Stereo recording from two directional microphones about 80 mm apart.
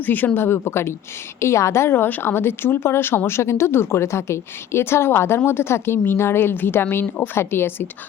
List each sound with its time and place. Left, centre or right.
0.0 s a woman's voice: left